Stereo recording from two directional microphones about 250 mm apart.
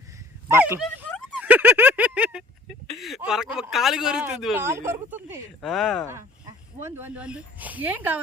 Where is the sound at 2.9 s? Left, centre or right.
Centre.